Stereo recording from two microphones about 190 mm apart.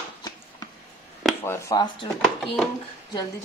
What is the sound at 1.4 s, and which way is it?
Speech, 15° left (ahead or behind).